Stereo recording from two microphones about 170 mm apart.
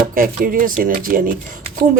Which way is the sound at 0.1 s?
55° right (ahead or behind).